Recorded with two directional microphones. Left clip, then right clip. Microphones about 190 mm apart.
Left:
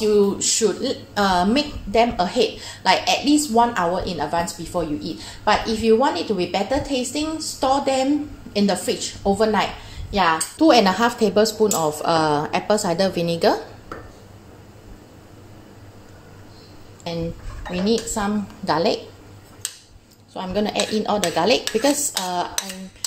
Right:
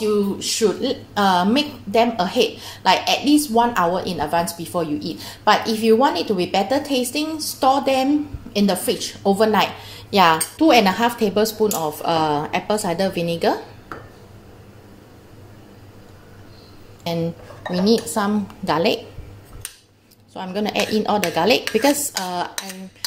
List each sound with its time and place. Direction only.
0.0 s a woman's voice: 5° left (ahead or behind)
0.8 s a woman's voice: 10° right (ahead or behind)
10.6 s a woman's voice: centre (ahead or behind)
17.6 s a woman's voice: 20° right (ahead or behind)
20.3 s a woman's voice: 10° right (ahead or behind)